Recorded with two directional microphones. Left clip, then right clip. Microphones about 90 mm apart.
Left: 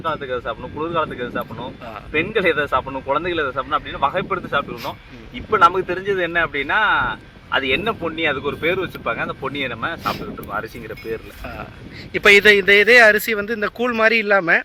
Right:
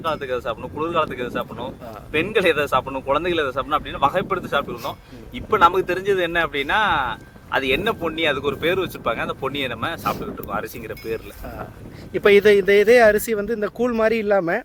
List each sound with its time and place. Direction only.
0.0 s speech: 55° right (ahead or behind)
2.1 s speech: 65° right (ahead or behind)
5.5 s speech: 85° right; by 11.2 s 70° right (ahead or behind)
12.1 s speech: 45° right (ahead or behind)